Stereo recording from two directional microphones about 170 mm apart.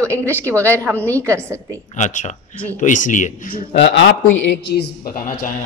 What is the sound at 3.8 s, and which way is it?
A man's voice, 80° left.